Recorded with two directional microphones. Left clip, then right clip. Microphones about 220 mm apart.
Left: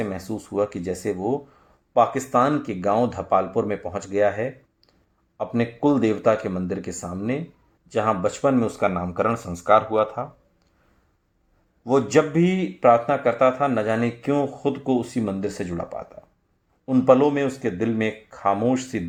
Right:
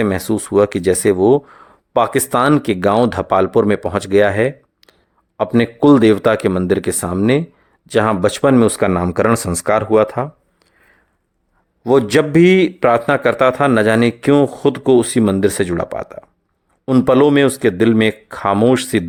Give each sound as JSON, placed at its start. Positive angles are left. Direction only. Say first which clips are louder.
{"t": 0.0, "sound": "a man's voice", "louder": "right 12 dB", "side_deg": -40}
{"t": 11.8, "sound": "a man's voice", "louder": "right 6 dB", "side_deg": -45}